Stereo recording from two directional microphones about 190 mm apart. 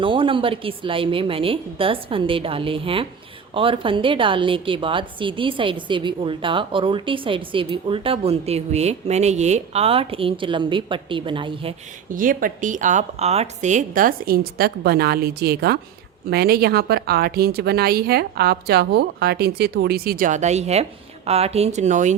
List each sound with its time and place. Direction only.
0.0 s a woman's voice: 25° right (ahead or behind)
12.1 s a woman's voice: 45° right (ahead or behind)